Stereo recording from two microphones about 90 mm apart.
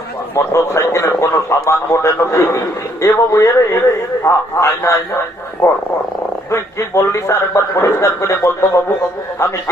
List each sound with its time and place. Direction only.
0.3 s a man's voice: 30° left (ahead or behind)
6.5 s a man's voice: 30° left (ahead or behind)